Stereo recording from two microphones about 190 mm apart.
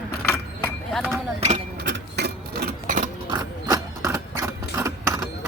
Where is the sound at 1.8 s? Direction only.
60° right (ahead or behind).